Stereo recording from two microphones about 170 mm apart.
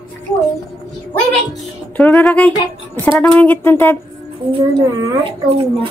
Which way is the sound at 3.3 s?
10° left (ahead or behind).